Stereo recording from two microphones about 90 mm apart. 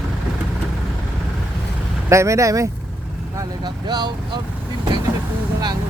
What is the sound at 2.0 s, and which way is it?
Speech, 35° right (ahead or behind).